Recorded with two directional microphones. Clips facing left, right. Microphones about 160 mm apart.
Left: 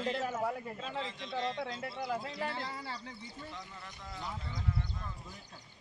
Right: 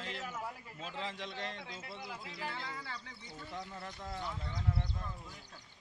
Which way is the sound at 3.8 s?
50° right (ahead or behind).